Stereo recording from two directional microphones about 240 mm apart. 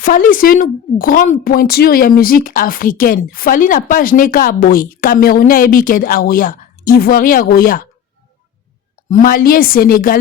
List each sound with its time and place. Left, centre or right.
0.0 s a woman's voice: left
9.0 s a woman's voice: left